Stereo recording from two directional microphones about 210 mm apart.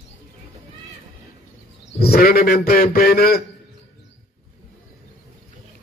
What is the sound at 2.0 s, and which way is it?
A man's voice, 45° left (ahead or behind).